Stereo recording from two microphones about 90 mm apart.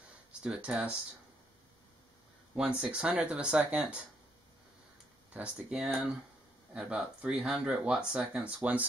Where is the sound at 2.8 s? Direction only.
10° right (ahead or behind).